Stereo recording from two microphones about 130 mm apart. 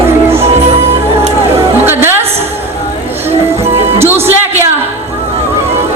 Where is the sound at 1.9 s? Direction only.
15° right (ahead or behind).